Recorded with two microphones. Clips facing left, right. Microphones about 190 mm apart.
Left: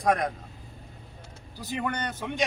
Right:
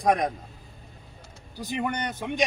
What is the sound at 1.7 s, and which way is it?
Speech, 15° right (ahead or behind).